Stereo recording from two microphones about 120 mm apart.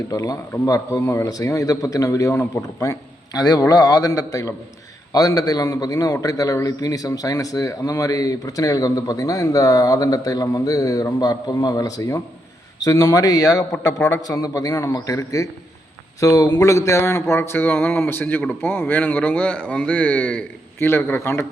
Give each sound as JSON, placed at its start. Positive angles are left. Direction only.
{"t": 0.1, "sound": "a man's voice", "side_deg": 30}